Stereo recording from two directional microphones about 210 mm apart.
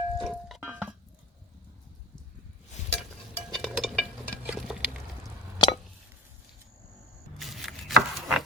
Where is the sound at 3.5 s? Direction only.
Centre (ahead or behind).